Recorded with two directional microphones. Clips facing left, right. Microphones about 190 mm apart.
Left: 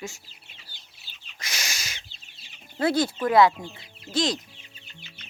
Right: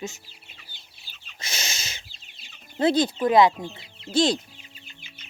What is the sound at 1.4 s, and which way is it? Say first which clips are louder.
Bird: right 1 dB; 25° right (ahead or behind).